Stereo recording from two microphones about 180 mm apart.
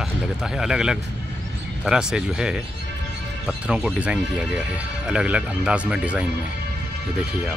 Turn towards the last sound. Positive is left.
turn(degrees=-5)  # may be behind; listen again after turning